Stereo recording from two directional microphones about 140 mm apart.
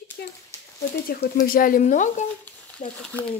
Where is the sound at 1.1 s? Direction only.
90° left; by 3.0 s 55° left (ahead or behind).